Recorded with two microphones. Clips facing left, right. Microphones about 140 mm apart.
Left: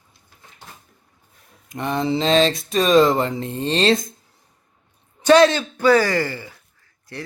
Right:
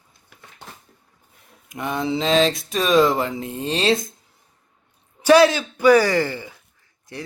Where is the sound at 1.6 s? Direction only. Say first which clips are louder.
Left 2 dB; 5° right (ahead or behind).